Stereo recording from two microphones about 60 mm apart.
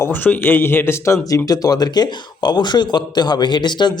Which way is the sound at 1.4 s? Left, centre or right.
Left.